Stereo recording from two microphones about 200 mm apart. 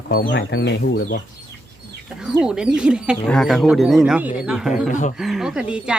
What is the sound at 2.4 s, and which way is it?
Speech, 5° right (ahead or behind).